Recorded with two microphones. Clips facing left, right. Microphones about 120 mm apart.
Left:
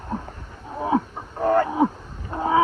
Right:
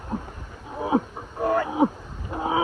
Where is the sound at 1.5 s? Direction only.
40° left (ahead or behind).